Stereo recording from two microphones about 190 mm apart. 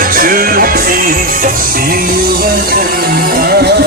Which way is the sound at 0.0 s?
50° right (ahead or behind).